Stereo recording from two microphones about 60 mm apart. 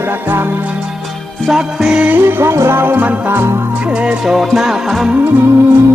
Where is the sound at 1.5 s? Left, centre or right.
Centre.